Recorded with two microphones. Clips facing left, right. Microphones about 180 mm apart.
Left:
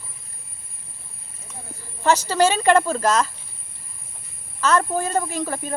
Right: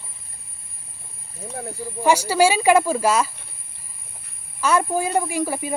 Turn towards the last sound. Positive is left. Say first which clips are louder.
# right 3 dB
turn(degrees=-10)  # may be behind; listen again after turning